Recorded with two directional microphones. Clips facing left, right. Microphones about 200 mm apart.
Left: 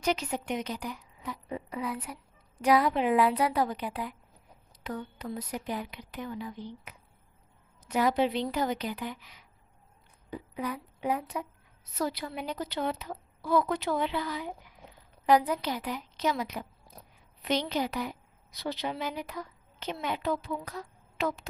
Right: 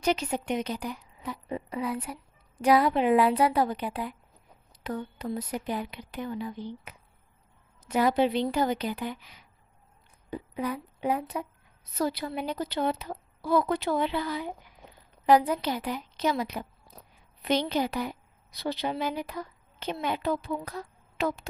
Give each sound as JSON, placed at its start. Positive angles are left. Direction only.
{"t": 0.0, "sound": "a woman's voice", "side_deg": -30}
{"t": 7.9, "sound": "a woman's voice", "side_deg": -30}